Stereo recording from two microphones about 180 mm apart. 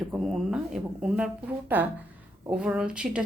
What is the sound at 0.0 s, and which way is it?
A woman's voice, centre (ahead or behind).